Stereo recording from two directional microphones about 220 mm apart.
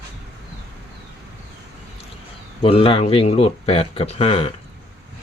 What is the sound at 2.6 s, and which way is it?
Speech, 25° left (ahead or behind).